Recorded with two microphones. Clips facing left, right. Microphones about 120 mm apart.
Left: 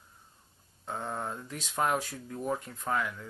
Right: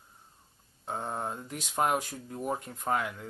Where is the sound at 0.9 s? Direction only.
25° right (ahead or behind).